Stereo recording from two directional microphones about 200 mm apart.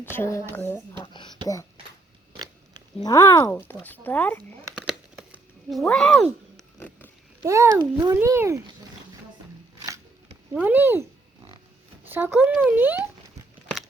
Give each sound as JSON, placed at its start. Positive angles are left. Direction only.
{"t": 0.0, "sound": "speech", "side_deg": 10}
{"t": 1.0, "sound": "whispering", "side_deg": 20}
{"t": 2.3, "sound": "pig", "side_deg": -20}
{"t": 3.0, "sound": "speech", "side_deg": 15}
{"t": 4.9, "sound": "a sound", "side_deg": 0}
{"t": 5.9, "sound": "speech", "side_deg": 0}
{"t": 6.7, "sound": "a sound", "side_deg": 10}
{"t": 7.4, "sound": "a child's voice", "side_deg": -15}
{"t": 10.5, "sound": "a child's voice", "side_deg": -10}
{"t": 12.0, "sound": "a child's voice", "side_deg": -10}